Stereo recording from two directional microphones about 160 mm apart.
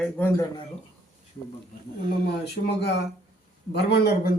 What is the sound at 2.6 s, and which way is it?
A man's voice, 90° left.